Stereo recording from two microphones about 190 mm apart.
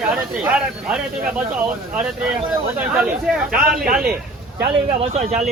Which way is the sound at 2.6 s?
10° right (ahead or behind).